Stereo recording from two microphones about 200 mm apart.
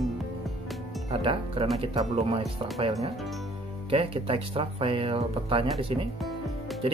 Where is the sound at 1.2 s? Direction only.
25° right (ahead or behind).